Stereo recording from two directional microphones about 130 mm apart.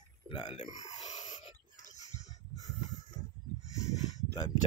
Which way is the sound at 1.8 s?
70° left (ahead or behind).